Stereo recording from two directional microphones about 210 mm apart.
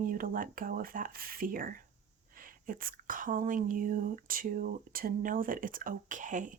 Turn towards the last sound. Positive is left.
turn(degrees=-35)  # may be behind; listen again after turning